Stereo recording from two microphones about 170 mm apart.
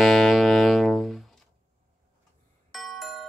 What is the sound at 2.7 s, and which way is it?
Doorbell, centre (ahead or behind).